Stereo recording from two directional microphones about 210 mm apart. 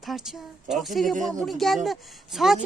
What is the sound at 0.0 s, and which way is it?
A woman's voice, centre (ahead or behind).